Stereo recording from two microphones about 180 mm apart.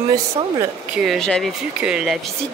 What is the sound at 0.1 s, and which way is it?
Speech, 20° right (ahead or behind).